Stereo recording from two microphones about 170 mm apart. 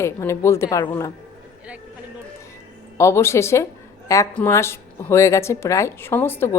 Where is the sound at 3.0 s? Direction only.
15° left (ahead or behind).